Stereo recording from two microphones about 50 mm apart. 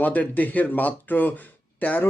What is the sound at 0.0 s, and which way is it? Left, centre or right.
Speech, left.